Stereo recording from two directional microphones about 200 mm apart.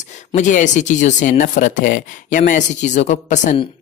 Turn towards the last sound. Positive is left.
turn(degrees=40)  # may be behind; listen again after turning